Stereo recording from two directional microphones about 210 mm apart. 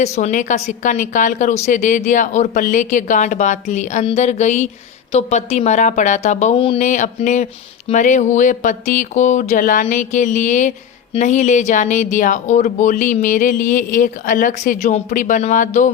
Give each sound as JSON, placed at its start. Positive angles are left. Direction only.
{"t": 0.0, "sound": "speech", "side_deg": 35}